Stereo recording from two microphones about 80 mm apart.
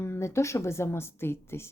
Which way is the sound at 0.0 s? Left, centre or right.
Left.